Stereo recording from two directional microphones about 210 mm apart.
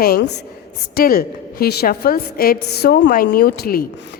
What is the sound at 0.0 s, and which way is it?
A woman's voice, 50° left (ahead or behind).